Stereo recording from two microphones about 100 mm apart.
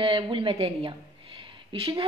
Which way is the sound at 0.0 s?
60° right (ahead or behind).